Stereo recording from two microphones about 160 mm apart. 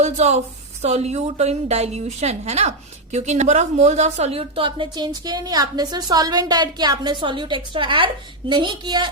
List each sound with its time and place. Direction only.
0.0 s speech: 45° right (ahead or behind); by 9.0 s 30° right (ahead or behind)